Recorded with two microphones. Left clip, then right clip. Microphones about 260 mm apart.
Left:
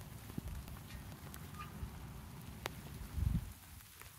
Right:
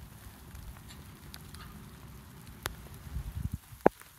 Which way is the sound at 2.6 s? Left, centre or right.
Centre.